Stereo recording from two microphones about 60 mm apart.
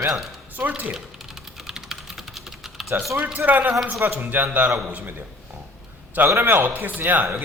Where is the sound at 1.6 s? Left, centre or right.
Centre.